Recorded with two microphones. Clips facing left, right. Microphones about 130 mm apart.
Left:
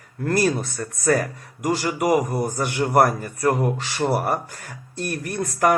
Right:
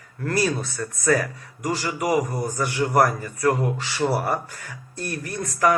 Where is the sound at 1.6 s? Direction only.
45° left (ahead or behind).